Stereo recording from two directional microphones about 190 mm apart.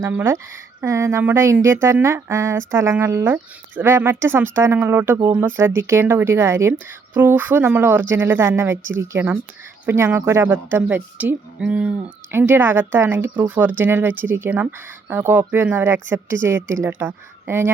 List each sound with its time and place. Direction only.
0.0 s a woman's voice: 10° right (ahead or behind)